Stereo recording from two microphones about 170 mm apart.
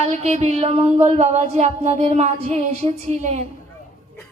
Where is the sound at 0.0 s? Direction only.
40° right (ahead or behind).